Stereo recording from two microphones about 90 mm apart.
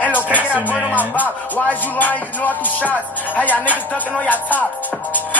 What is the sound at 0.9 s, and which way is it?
Music, 20° left (ahead or behind).